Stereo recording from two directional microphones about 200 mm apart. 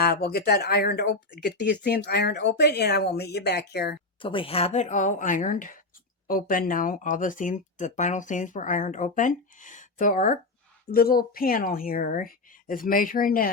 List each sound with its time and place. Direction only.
0.0 s speech: 50° left (ahead or behind)
4.2 s speech: 25° left (ahead or behind); by 13.5 s 45° left (ahead or behind)